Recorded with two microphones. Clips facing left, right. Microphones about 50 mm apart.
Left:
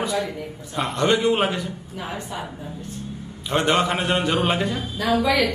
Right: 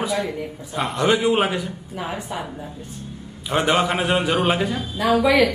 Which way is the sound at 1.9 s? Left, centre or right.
Centre.